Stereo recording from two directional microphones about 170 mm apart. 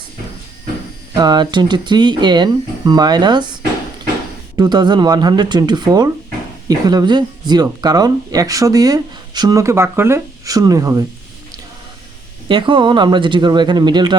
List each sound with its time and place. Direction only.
1.1 s speech: 25° right (ahead or behind)
12.5 s speech: 30° right (ahead or behind)